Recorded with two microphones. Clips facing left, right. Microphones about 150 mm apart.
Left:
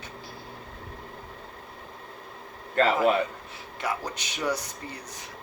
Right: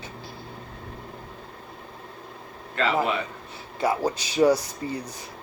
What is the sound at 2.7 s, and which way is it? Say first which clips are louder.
Speech: left 2 dB; 45° left (ahead or behind).